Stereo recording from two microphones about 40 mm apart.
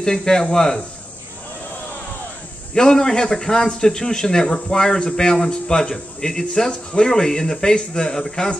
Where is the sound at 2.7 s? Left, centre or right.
Centre.